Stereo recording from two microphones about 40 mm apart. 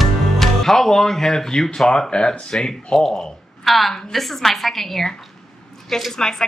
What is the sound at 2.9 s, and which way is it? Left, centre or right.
A woman's voice, centre.